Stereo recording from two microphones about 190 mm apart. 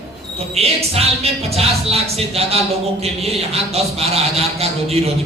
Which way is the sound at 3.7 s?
35° right (ahead or behind).